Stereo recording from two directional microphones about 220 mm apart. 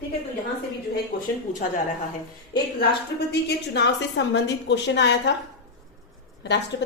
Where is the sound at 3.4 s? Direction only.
50° left (ahead or behind).